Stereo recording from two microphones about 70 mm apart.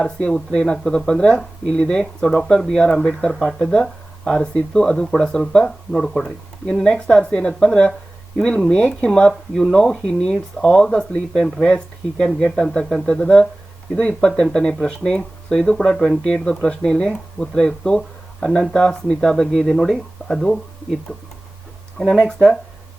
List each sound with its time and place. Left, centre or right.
0.0 s speech: centre
21.9 s speech: centre